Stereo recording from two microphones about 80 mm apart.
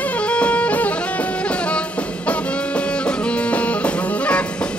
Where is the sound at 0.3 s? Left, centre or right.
Centre.